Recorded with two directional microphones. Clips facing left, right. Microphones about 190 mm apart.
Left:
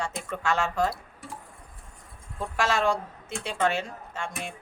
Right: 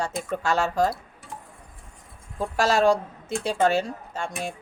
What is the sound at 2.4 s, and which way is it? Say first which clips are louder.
Speech: right 5 dB; 40° right (ahead or behind).